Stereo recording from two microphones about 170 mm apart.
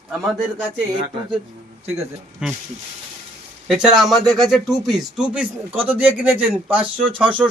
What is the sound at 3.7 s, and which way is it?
A man's voice, 5° right (ahead or behind).